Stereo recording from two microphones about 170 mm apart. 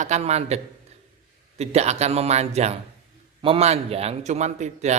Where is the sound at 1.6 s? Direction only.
40° right (ahead or behind).